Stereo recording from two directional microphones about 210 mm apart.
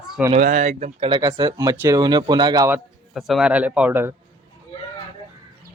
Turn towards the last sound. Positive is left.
turn(degrees=-10)  # may be behind; listen again after turning